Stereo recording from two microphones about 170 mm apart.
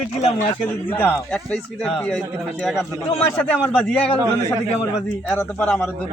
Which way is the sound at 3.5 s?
10° left (ahead or behind).